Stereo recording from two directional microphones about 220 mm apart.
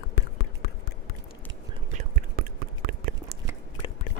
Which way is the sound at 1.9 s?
40° right (ahead or behind).